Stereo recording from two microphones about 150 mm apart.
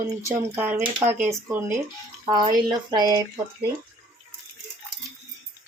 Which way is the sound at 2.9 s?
25° right (ahead or behind).